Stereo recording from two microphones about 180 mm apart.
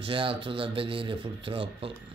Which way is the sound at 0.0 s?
30° right (ahead or behind).